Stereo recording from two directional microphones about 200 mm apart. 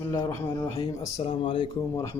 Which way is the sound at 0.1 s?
15° left (ahead or behind).